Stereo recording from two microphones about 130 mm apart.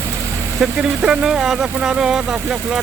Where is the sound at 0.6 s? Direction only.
5° right (ahead or behind).